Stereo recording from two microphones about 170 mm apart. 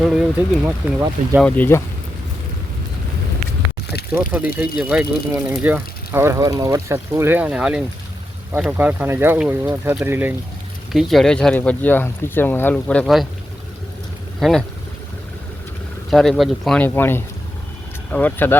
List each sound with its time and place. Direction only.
0.0 s speech: centre (ahead or behind)
1.4 s speech: 10° left (ahead or behind)
4.1 s speech: 5° right (ahead or behind)
10.9 s speech: centre (ahead or behind)
14.3 s speech: centre (ahead or behind)
16.0 s speech: centre (ahead or behind)